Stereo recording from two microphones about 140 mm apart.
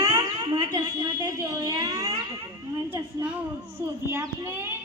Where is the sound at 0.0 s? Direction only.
25° right (ahead or behind).